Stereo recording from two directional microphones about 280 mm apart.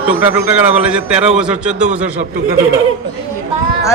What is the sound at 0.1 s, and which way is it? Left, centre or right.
A man's voice, centre.